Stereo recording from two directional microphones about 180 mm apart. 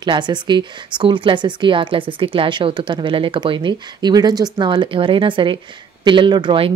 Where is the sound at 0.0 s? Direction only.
25° right (ahead or behind).